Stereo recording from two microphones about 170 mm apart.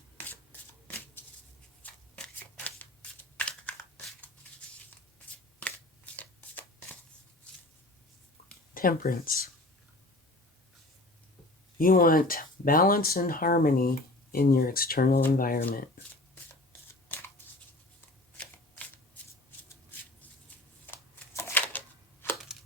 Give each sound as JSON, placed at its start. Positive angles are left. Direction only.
{"t": 1.8, "sound": "shuffling cards", "side_deg": 10}
{"t": 3.3, "sound": "crumpling", "side_deg": 10}
{"t": 8.7, "sound": "speech", "side_deg": 60}
{"t": 11.8, "sound": "speech", "side_deg": 55}
{"t": 17.1, "sound": "scissors", "side_deg": 15}
{"t": 18.3, "sound": "shuffling cards", "side_deg": 5}
{"t": 20.5, "sound": "shuffling cards", "side_deg": 10}
{"t": 20.8, "sound": "a sound", "side_deg": 15}